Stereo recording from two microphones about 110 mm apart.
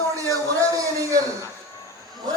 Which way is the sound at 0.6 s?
30° right (ahead or behind).